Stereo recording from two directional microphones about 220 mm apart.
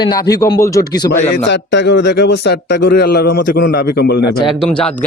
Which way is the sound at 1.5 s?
55° left (ahead or behind).